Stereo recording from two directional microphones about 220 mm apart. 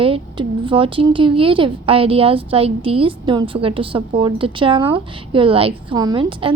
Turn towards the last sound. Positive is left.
turn(degrees=-20)  # may be behind; listen again after turning